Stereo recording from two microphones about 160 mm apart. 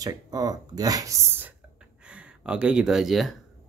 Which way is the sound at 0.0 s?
25° right (ahead or behind).